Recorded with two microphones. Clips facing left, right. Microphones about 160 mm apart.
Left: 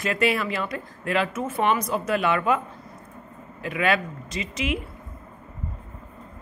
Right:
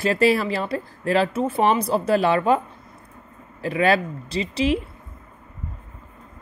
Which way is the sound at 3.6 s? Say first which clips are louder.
Right 4 dB; 35° right (ahead or behind).